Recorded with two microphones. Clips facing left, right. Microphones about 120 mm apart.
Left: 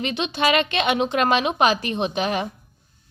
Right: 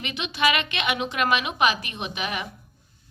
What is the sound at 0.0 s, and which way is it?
A woman's voice, 30° left (ahead or behind).